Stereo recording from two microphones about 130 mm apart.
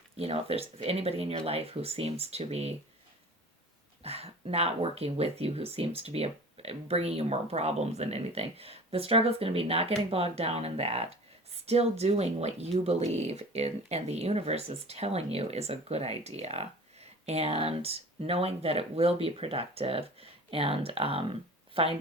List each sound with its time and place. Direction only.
0.2 s speech: 50° right (ahead or behind)
4.0 s speech: 50° right (ahead or behind)